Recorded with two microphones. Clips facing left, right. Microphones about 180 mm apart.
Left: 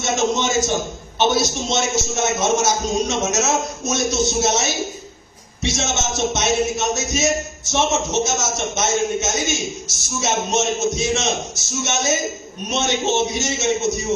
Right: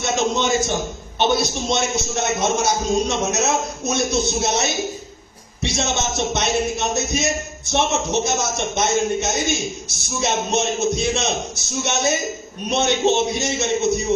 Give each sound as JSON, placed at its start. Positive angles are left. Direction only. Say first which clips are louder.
{"t": 0.3, "sound": "a man's voice", "louder": "even", "side_deg": -60}